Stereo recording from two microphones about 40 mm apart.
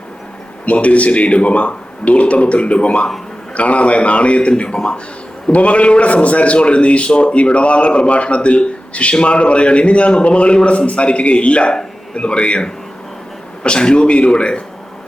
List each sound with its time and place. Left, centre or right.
0.6 s a man's voice: left